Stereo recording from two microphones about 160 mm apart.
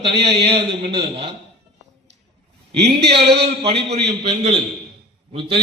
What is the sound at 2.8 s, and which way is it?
Speech, 90° right.